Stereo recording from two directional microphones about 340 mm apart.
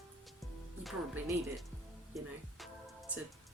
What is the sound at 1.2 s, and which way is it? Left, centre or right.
Speech, centre.